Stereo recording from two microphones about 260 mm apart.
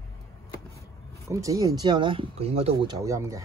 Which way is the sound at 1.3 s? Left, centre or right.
Centre.